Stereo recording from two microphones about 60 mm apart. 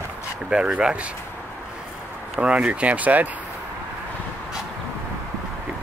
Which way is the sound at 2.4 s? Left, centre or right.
Centre.